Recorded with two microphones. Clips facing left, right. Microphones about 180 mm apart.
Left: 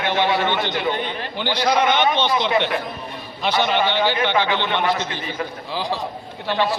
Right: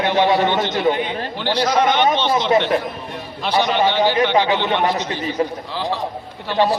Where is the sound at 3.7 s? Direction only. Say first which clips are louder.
Right 3 dB; 40° right (ahead or behind).